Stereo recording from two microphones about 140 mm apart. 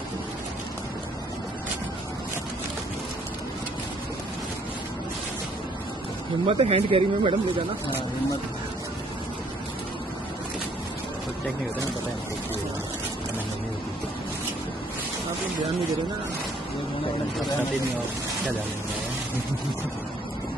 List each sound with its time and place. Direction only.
6.4 s speech: 45° right (ahead or behind)